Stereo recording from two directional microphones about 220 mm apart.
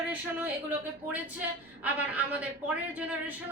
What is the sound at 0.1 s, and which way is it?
A woman's voice, 10° right (ahead or behind).